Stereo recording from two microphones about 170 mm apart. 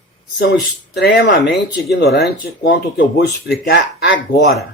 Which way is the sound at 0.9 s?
80° left.